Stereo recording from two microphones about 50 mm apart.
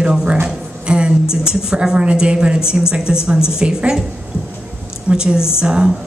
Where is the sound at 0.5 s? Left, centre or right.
Right.